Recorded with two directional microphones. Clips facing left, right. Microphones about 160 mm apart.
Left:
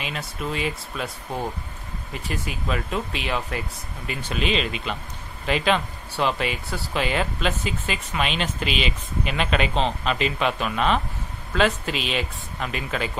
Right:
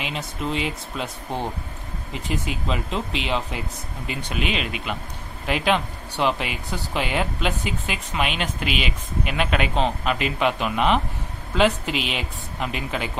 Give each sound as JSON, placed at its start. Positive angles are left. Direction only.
{"t": 0.0, "sound": "speech", "side_deg": -20}